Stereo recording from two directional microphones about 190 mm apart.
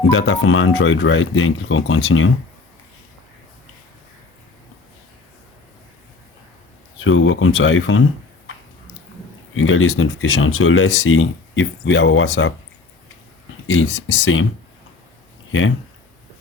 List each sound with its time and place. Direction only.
0.1 s speech: 90° left
7.0 s speech: 90° left
9.6 s speech: 90° left
13.7 s speech: 90° left